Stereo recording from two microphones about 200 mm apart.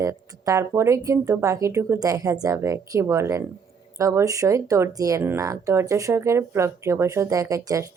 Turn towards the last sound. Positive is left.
turn(degrees=-15)  # may be behind; listen again after turning